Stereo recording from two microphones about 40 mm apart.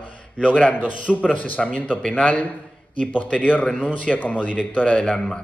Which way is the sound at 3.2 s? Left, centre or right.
Left.